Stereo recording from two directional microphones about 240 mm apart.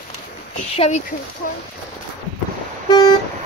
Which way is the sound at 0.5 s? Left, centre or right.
Left.